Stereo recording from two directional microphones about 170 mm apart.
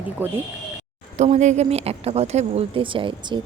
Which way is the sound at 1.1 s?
45° right (ahead or behind).